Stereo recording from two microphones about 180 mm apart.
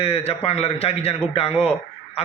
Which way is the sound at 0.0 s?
35° left (ahead or behind).